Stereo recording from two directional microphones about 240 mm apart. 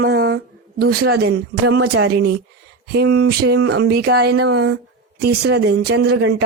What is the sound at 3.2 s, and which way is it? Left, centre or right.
Speech, right.